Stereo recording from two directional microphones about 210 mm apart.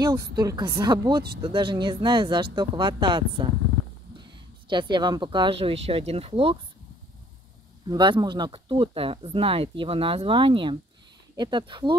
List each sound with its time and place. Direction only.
0.4 s speech: 20° right (ahead or behind)
7.9 s speech: 20° right (ahead or behind)